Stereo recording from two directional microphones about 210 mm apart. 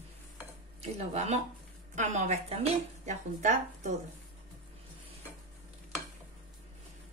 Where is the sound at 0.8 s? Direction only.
30° right (ahead or behind).